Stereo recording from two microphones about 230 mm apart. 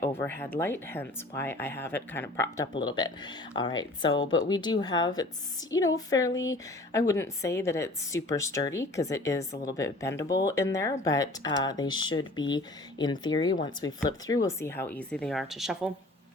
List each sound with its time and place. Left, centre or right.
0.0 s a woman's voice: centre